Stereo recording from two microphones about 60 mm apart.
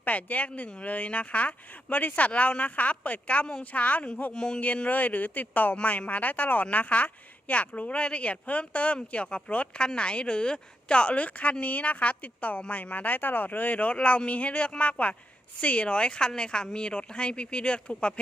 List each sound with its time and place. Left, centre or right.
0.0 s speech: left
4.6 s speech: left